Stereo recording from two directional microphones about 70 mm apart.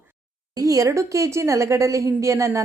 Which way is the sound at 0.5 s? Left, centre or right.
Right.